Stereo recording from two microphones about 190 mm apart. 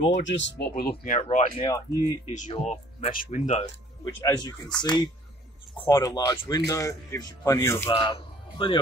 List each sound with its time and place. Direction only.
0.2 s speech: 70° left (ahead or behind); by 1.5 s 40° left (ahead or behind)
1.9 s speech: 15° right (ahead or behind)
2.3 s speech: 40° left (ahead or behind)
4.0 s speech: 20° left (ahead or behind)
7.9 s speech: 25° left (ahead or behind)